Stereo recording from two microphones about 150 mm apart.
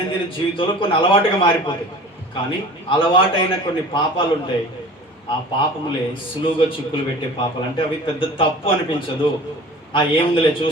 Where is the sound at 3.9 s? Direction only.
35° left (ahead or behind).